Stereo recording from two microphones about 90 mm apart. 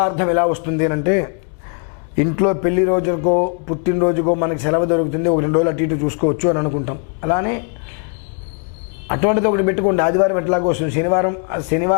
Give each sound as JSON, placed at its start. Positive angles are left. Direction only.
{"t": 0.0, "sound": "a man's voice", "side_deg": 15}
{"t": 9.0, "sound": "a man's voice", "side_deg": 15}